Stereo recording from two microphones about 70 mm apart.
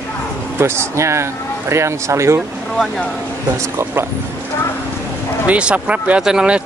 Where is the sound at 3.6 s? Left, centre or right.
Right.